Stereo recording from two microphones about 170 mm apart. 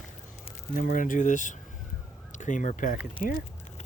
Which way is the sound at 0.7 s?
55° left (ahead or behind).